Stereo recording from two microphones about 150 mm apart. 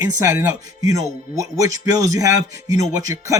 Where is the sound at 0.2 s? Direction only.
20° right (ahead or behind).